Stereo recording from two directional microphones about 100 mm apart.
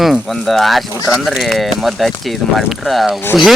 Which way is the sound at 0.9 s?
35° left (ahead or behind).